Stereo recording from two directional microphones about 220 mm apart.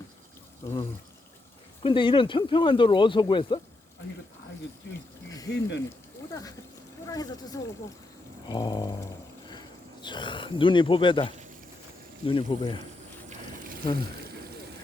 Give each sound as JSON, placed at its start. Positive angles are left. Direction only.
{"t": 1.8, "sound": "speech", "side_deg": 25}
{"t": 5.5, "sound": "speech", "side_deg": 50}
{"t": 6.3, "sound": "speech", "side_deg": 15}
{"t": 13.8, "sound": "speech", "side_deg": 20}